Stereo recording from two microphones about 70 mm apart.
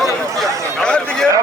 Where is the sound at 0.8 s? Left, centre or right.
Centre.